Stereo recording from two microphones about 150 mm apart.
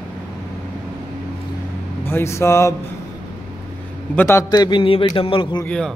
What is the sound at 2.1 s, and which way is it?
Speech, 15° left (ahead or behind).